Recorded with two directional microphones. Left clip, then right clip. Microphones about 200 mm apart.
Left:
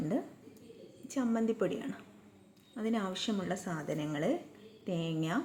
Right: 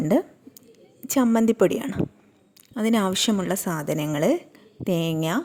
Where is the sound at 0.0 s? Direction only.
45° right (ahead or behind).